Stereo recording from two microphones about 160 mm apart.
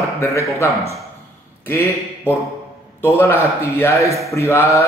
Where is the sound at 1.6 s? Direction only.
15° left (ahead or behind).